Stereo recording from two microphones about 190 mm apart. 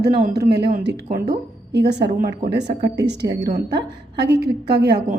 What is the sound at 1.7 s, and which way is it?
A woman's voice, 60° right (ahead or behind).